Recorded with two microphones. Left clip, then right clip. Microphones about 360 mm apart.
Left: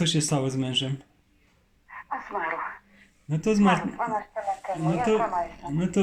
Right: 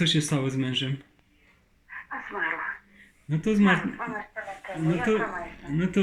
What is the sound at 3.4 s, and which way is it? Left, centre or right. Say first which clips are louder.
Speech: left 1 dB; centre.